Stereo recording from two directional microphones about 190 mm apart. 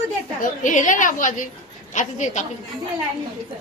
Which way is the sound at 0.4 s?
45° left (ahead or behind).